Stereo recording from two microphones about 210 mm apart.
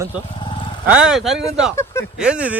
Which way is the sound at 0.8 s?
5° right (ahead or behind).